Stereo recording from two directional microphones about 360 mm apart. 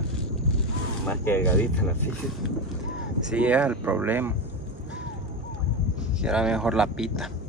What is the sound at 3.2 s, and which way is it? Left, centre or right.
Speech, centre.